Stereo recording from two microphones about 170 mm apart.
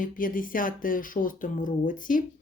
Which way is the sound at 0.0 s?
55° left (ahead or behind).